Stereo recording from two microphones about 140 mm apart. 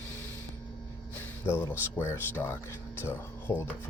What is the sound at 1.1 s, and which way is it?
Music, 15° left (ahead or behind).